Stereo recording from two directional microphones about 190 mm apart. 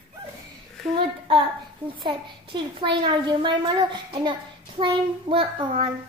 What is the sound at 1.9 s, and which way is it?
A woman's voice, 25° right (ahead or behind).